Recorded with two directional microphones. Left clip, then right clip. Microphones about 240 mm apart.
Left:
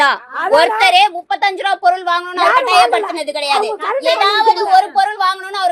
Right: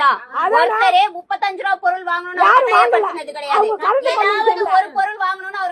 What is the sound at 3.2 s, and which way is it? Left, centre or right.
Speech, left.